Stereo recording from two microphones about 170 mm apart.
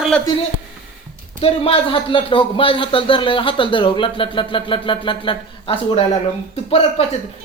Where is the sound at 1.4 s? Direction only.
35° left (ahead or behind).